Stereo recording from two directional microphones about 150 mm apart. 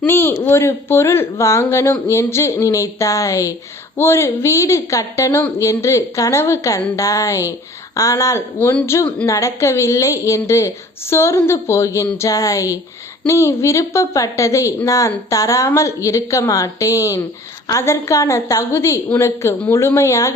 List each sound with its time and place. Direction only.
0.0 s a woman's voice: 15° left (ahead or behind)